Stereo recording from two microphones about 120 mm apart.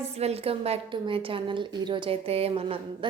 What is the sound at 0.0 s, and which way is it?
A woman's voice, 60° right (ahead or behind).